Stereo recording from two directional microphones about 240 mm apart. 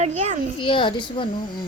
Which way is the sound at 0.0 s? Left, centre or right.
Right.